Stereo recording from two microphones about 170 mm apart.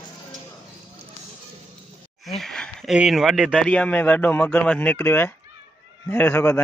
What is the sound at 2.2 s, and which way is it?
Speech, centre (ahead or behind).